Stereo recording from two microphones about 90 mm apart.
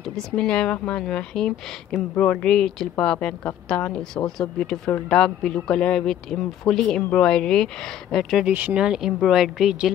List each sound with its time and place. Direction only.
0.1 s a man's voice: 10° left (ahead or behind)
8.5 s speech: 20° right (ahead or behind)
8.7 s a man's voice: 10° right (ahead or behind)